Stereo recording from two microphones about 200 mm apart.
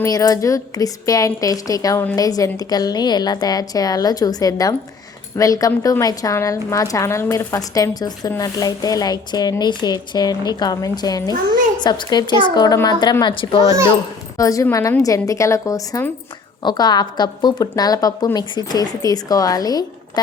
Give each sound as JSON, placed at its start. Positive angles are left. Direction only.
{"t": 0.0, "sound": "a woman's voice", "side_deg": 15}